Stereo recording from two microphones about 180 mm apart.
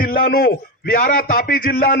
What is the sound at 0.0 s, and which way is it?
A man's voice, 55° left (ahead or behind).